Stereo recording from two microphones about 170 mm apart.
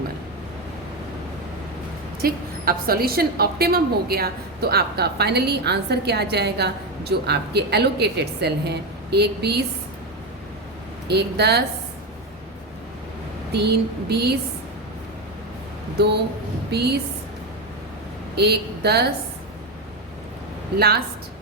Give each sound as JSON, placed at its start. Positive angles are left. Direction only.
{"t": 2.2, "sound": "a woman's voice", "side_deg": -60}
{"t": 11.1, "sound": "a woman's voice", "side_deg": -75}
{"t": 13.5, "sound": "a woman's voice", "side_deg": -75}
{"t": 16.0, "sound": "a woman's voice", "side_deg": -75}
{"t": 18.3, "sound": "a woman's voice", "side_deg": -75}
{"t": 20.7, "sound": "a woman's voice", "side_deg": -70}